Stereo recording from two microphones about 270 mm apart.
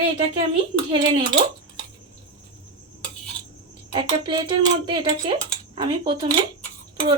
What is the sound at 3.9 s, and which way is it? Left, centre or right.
Speech, centre.